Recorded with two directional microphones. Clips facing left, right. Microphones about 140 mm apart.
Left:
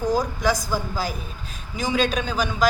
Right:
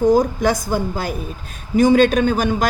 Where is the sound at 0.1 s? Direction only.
50° right (ahead or behind).